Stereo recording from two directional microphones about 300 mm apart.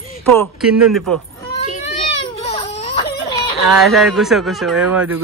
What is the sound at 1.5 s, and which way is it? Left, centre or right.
Baby cry, left.